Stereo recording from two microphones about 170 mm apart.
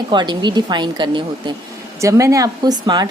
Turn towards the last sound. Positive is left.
turn(degrees=-25)  # may be behind; listen again after turning